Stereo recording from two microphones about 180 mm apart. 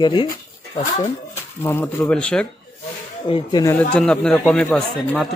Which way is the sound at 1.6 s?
15° left (ahead or behind).